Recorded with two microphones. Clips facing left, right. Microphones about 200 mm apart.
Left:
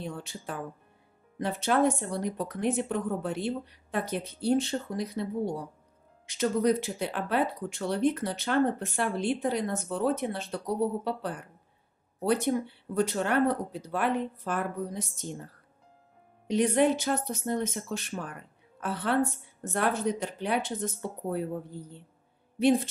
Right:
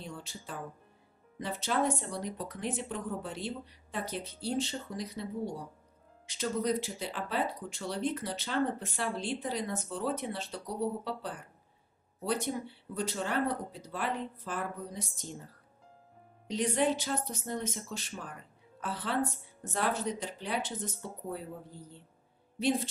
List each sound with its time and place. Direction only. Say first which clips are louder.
0.0 s speech: left 6 dB; 60° left (ahead or behind)
16.4 s speech: left 6 dB; 60° left (ahead or behind)